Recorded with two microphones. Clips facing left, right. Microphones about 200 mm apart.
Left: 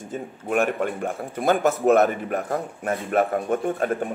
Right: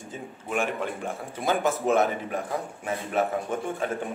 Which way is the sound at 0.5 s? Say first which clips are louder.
Left 6 dB; 55° left (ahead or behind).